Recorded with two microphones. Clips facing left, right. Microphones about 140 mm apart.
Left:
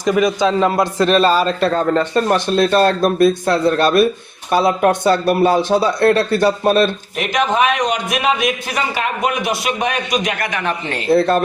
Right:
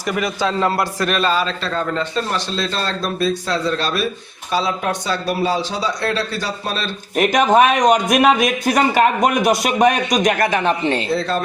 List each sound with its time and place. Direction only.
0.0 s a man's voice: 20° left (ahead or behind); by 6.9 s 55° left (ahead or behind)
7.2 s speech: 45° right (ahead or behind); by 11.0 s 30° right (ahead or behind)
11.1 s speech: 55° left (ahead or behind)